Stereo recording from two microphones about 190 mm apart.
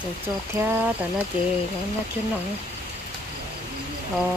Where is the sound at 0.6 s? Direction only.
15° right (ahead or behind).